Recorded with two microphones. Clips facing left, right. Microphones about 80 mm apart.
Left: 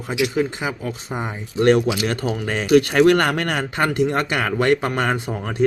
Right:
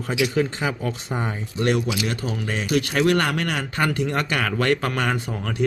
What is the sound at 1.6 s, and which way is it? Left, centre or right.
Speech, left.